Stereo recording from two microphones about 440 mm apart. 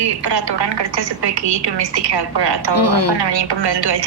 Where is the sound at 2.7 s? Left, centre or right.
Left.